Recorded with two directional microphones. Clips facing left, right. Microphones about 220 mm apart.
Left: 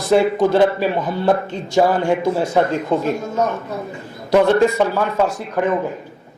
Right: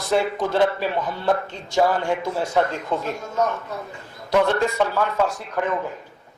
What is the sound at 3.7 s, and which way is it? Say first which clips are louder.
Speech: left 6 dB; 20° left (ahead or behind).